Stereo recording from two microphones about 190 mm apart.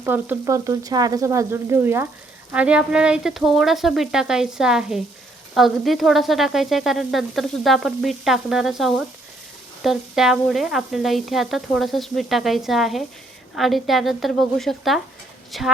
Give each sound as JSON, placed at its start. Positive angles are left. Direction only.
{"t": 0.0, "sound": "speech", "side_deg": -10}
{"t": 2.5, "sound": "frying", "side_deg": -5}